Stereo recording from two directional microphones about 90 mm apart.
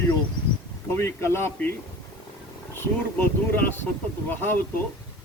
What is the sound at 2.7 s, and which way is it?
Speech, 25° left (ahead or behind).